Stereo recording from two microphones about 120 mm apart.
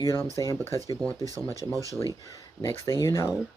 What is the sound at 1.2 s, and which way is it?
Speech, 30° right (ahead or behind).